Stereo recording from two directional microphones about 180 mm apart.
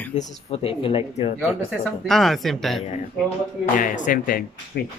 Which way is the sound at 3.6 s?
45° left (ahead or behind).